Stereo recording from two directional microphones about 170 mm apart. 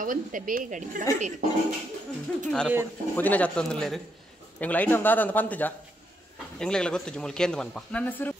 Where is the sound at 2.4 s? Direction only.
5° left (ahead or behind).